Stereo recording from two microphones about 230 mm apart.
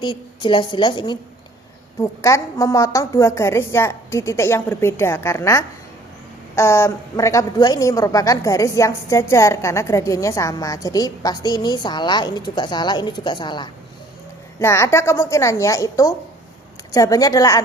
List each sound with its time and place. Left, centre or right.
0.0 s a woman's voice: centre